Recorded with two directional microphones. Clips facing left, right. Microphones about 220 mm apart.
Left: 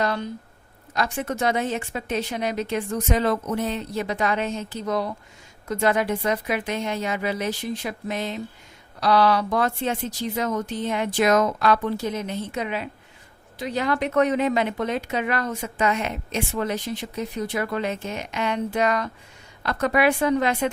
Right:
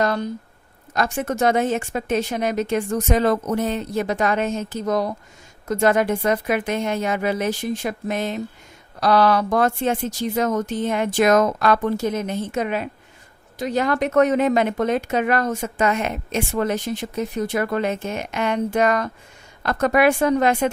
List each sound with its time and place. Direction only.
0.0 s a woman's voice: 45° right (ahead or behind)